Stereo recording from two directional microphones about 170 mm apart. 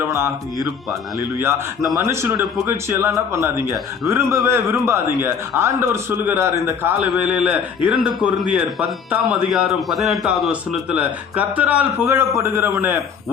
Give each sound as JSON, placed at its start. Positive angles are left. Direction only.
{"t": 1.4, "sound": "a man's voice", "side_deg": -15}